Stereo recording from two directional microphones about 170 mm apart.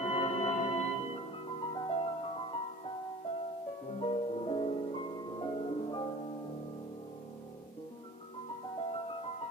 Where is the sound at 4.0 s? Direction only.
35° left (ahead or behind).